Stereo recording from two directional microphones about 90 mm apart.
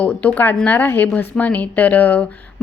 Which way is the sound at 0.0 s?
15° left (ahead or behind).